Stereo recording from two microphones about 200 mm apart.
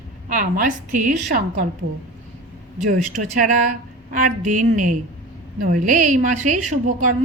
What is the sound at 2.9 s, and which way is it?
A woman's voice, 40° right (ahead or behind).